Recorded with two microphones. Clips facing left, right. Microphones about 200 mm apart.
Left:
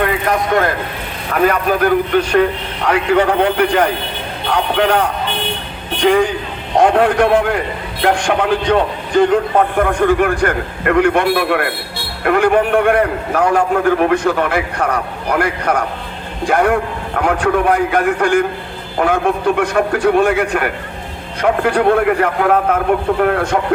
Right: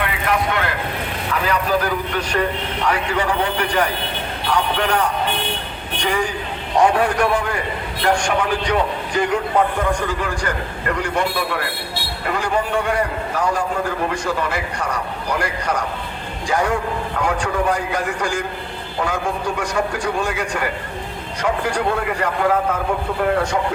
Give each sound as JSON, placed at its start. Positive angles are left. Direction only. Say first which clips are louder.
{"t": 0.0, "sound": "a sound", "louder": "left 5 dB", "side_deg": 45}
{"t": 1.3, "sound": "a man's voice", "louder": "left 6 dB", "side_deg": 55}
{"t": 6.0, "sound": "a man's voice", "louder": "left 9 dB", "side_deg": 55}